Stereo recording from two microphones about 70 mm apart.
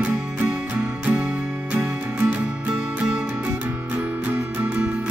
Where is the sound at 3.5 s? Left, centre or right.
Right.